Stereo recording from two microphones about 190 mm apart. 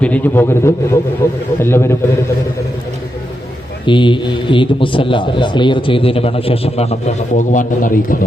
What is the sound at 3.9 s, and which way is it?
A man's voice, 25° left (ahead or behind).